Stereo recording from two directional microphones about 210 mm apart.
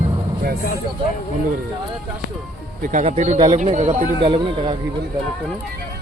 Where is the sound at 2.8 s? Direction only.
35° right (ahead or behind).